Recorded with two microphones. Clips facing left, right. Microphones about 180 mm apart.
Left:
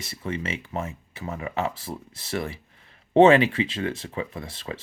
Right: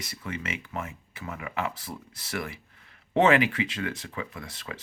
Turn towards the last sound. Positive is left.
turn(degrees=30)  # may be behind; listen again after turning